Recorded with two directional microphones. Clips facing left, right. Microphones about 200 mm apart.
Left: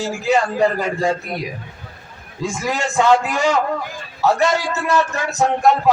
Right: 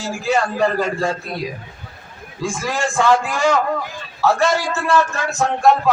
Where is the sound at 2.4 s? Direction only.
20° left (ahead or behind).